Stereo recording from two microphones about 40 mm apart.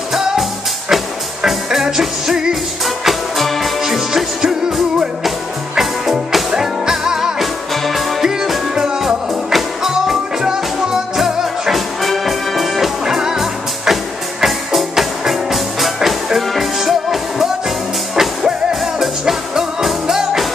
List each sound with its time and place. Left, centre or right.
0.1 s music: centre
2.8 s music: centre
3.8 s music: centre
5.8 s music: centre
7.7 s music: centre
8.7 s music: centre
9.0 s music: centre
13.0 s music: centre